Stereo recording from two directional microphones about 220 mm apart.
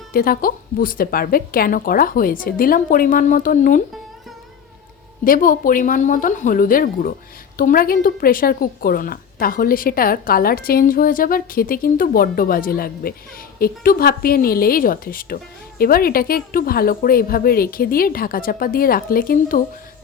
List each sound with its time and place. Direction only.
0.1 s a woman's voice: 40° left (ahead or behind)
5.2 s a woman's voice: 40° left (ahead or behind)